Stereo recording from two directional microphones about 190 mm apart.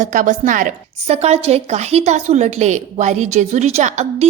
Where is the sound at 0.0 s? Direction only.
40° right (ahead or behind).